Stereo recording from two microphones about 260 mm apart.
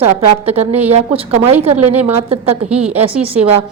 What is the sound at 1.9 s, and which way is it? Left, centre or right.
A woman's voice, centre.